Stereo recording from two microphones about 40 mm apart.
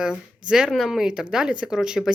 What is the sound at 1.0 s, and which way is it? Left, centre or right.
Speech, centre.